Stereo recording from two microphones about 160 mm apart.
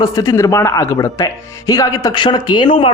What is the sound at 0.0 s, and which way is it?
Speech, 20° left (ahead or behind).